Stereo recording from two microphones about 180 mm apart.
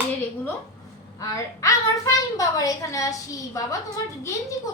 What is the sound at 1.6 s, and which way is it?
A woman's voice, 20° left (ahead or behind).